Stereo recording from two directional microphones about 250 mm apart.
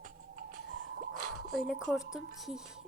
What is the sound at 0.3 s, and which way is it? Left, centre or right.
Music, right.